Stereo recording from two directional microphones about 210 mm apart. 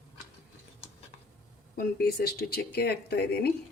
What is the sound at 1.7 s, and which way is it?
Speech, 45° left (ahead or behind).